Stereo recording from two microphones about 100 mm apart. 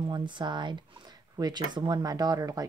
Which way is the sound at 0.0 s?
50° right (ahead or behind).